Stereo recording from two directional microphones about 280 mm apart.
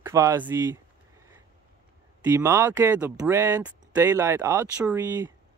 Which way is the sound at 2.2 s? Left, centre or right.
Centre.